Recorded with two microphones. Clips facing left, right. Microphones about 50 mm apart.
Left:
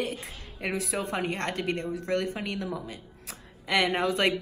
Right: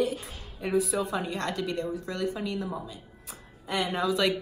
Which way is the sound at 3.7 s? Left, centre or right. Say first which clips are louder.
Left 2 dB; left.